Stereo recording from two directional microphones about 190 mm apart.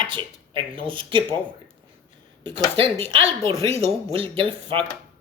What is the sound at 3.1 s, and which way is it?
Speech, 30° right (ahead or behind).